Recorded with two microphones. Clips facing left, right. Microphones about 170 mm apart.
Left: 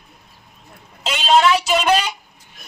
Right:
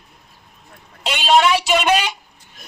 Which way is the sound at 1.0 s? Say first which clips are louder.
Even; centre (ahead or behind).